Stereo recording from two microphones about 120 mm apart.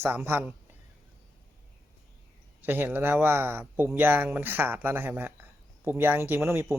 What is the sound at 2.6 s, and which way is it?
Speech, 15° right (ahead or behind).